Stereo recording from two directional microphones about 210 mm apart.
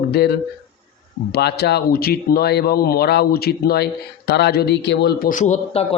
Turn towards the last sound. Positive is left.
turn(degrees=35)  # may be behind; listen again after turning